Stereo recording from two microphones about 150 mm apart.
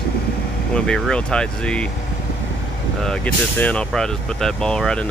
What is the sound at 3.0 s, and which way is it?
Speech, 10° left (ahead or behind).